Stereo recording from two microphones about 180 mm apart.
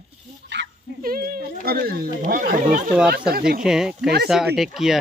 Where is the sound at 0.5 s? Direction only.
80° right.